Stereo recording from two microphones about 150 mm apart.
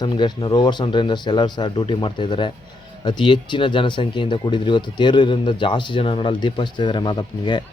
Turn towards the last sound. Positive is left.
turn(degrees=30)  # may be behind; listen again after turning